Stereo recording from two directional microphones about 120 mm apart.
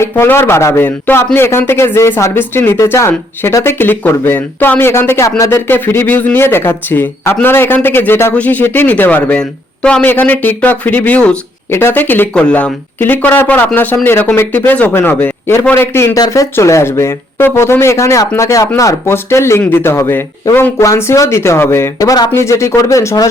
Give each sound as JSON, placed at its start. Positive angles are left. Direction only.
{"t": 0.0, "sound": "a man's voice", "side_deg": 20}